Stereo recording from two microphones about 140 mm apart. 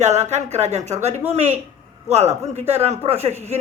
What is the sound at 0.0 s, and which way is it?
A woman's voice, 55° right (ahead or behind).